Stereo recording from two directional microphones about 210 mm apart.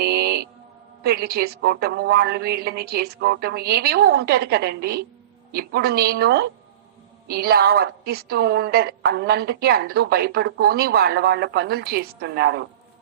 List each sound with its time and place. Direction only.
0.0 s mantra: 50° right (ahead or behind)
1.0 s a woman's voice: 50° right (ahead or behind)